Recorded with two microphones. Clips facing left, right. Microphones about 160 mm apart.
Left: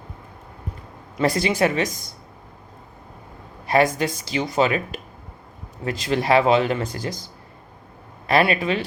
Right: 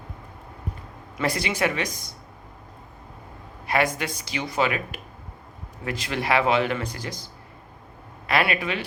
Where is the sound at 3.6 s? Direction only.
35° left (ahead or behind).